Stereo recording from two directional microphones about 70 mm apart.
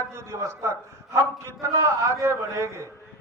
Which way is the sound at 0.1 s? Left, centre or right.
Right.